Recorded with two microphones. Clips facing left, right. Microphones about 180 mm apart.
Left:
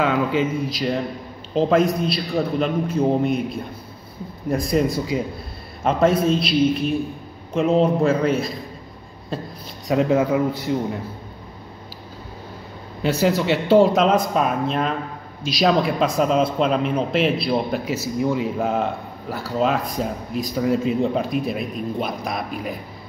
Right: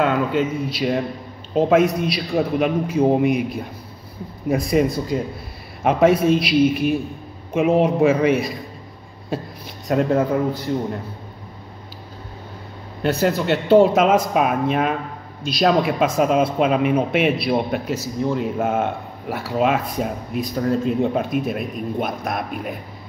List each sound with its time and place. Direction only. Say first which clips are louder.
0.0 s a man's voice: right 1 dB; centre (ahead or behind)
4.5 s speech: right 2 dB; 5° right (ahead or behind)
5.9 s a man's voice: right 2 dB; 10° right (ahead or behind)
9.8 s speech: even; centre (ahead or behind)
13.0 s speech: even; centre (ahead or behind)